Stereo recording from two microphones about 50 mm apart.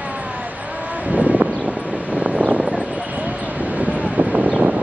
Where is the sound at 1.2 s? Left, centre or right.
Right.